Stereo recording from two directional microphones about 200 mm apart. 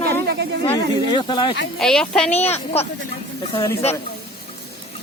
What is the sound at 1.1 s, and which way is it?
Speech, 25° left (ahead or behind).